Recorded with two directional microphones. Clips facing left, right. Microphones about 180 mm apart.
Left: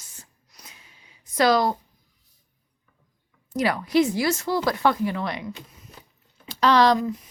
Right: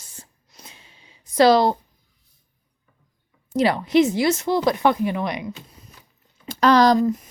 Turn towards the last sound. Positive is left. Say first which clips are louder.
# right 3 dB
turn(degrees=-40)  # may be behind; listen again after turning